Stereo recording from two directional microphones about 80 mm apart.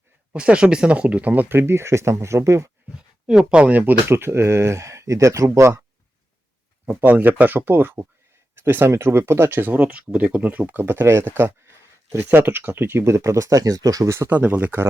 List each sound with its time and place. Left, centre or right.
0.3 s speech: centre; by 2.6 s right
3.2 s speech: centre
4.1 s speech: right
6.8 s speech: right
14.2 s speech: right